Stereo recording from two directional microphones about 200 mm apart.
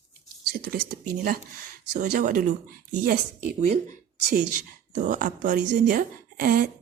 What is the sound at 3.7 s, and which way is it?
Speech, 40° right (ahead or behind).